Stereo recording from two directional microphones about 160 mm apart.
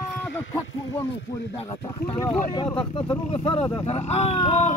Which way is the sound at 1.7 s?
20° left (ahead or behind).